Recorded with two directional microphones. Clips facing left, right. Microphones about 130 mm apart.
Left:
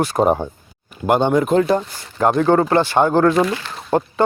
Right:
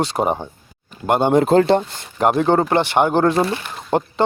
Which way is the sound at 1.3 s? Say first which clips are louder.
Right 2 dB; 30° right (ahead or behind).